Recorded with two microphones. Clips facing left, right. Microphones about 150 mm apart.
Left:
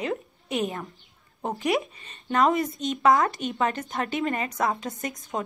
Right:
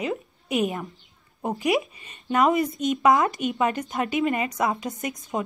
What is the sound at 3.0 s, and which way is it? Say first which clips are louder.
Speech: even; 20° right (ahead or behind).